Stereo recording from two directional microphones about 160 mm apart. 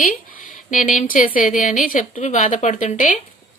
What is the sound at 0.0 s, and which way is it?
A woman's voice, 55° left (ahead or behind).